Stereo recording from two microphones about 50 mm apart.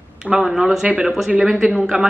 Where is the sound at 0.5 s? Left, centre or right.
Centre.